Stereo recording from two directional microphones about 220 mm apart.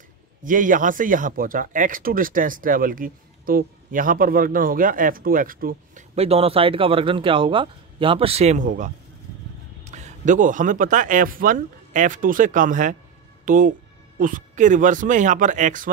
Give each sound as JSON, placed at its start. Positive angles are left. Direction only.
{"t": 0.4, "sound": "speech", "side_deg": -35}
{"t": 6.1, "sound": "speech", "side_deg": -25}